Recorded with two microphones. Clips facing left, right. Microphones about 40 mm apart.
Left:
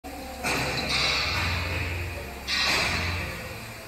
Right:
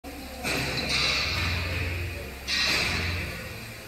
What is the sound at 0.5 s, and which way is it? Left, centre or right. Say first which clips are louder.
Music: left 2 dB; left.